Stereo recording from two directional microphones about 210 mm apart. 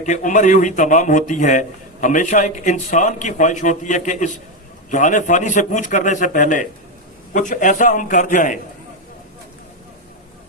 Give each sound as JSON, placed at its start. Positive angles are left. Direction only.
{"t": 0.0, "sound": "a man's voice", "side_deg": 35}